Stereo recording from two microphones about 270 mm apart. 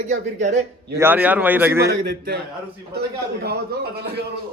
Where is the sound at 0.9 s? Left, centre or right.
Centre.